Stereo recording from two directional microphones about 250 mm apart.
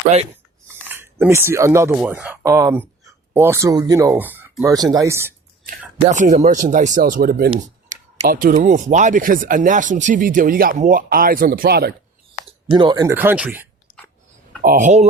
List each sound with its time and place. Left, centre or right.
0.9 s speech: centre
6.1 s speech: right
12.5 s speech: centre
14.6 s speech: right